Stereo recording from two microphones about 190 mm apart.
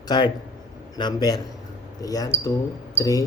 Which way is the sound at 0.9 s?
20° left (ahead or behind).